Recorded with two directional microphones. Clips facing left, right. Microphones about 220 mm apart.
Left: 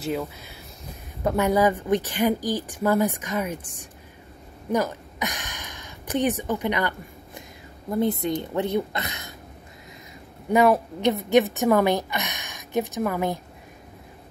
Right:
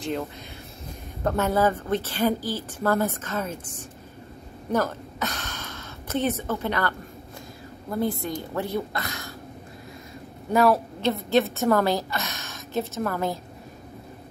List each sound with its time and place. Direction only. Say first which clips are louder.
0.0 s a woman's voice: left 1 dB; 5° left (ahead or behind); by 9.3 s 20° left (ahead or behind)
10.5 s a woman's voice: left 2 dB; 15° left (ahead or behind)